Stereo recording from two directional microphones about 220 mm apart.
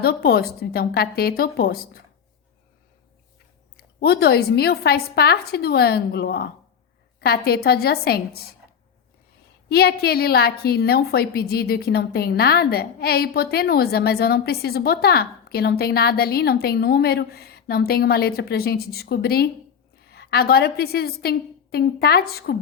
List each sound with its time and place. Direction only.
0.0 s a woman's voice: 45° left (ahead or behind)
3.8 s a woman's voice: 45° left (ahead or behind)
9.6 s a woman's voice: 45° left (ahead or behind)